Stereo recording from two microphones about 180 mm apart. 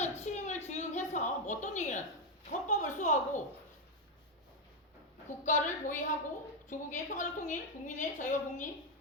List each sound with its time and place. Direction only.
0.0 s a woman's voice: 40° left (ahead or behind)
5.4 s a woman's voice: 45° left (ahead or behind)